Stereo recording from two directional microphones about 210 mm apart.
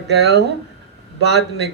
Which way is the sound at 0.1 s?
50° right (ahead or behind).